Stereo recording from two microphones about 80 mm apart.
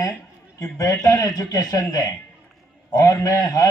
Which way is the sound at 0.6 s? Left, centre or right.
Left.